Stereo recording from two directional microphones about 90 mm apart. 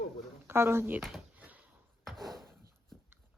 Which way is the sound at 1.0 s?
Centre (ahead or behind).